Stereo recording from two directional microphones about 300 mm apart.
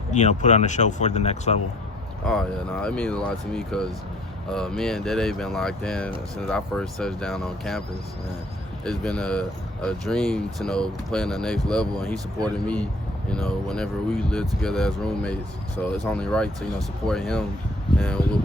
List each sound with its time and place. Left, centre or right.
0.1 s speech: left
2.2 s speech: centre
8.8 s speech: centre